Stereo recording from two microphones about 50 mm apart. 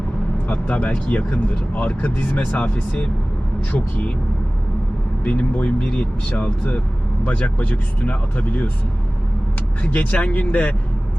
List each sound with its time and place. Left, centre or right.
0.4 s speech: left
5.2 s speech: left
9.8 s speech: left